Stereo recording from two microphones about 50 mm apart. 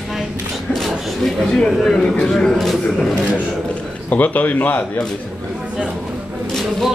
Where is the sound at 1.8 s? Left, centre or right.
Centre.